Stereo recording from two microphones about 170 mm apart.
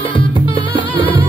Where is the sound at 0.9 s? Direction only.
30° left (ahead or behind).